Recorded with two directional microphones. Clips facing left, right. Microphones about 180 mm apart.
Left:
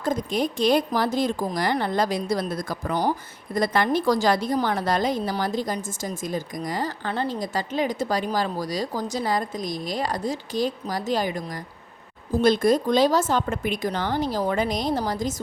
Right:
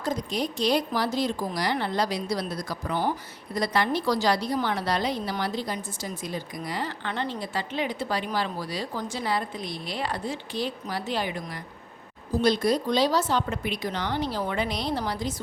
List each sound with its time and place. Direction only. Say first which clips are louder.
0.0 s a woman's voice: left 4 dB; 50° left (ahead or behind)